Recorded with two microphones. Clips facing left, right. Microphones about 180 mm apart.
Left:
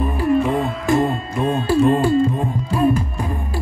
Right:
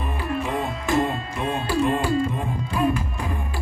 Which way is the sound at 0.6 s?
Centre (ahead or behind).